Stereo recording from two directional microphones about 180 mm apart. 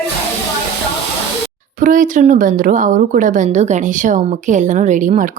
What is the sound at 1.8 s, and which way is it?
Speech, 45° right (ahead or behind).